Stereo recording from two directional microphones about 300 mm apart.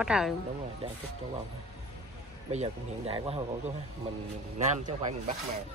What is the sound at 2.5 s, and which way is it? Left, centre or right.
Speech, centre.